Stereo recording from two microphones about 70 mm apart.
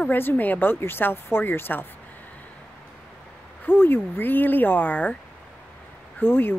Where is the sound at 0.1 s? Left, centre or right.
Left.